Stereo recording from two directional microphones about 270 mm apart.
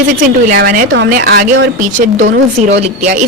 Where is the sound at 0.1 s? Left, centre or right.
Right.